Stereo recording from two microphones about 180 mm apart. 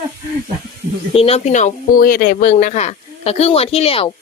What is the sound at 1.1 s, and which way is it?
A woman's voice, 35° left (ahead or behind).